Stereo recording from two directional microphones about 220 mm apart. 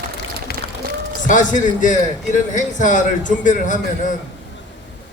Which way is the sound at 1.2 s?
35° left (ahead or behind).